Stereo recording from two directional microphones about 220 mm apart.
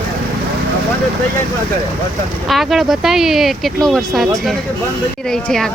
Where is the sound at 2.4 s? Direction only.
Centre (ahead or behind).